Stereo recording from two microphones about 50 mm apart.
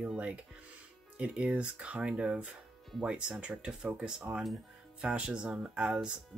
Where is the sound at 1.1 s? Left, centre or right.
Right.